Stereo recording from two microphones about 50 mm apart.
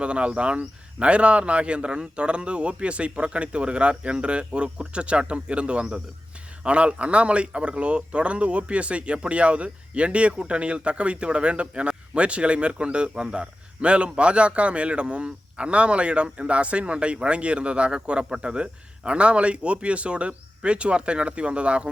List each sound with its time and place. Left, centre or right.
0.0 s speech: right